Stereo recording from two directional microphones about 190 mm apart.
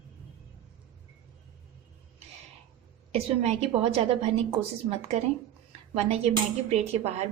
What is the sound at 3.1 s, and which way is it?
A woman's voice, 35° right (ahead or behind).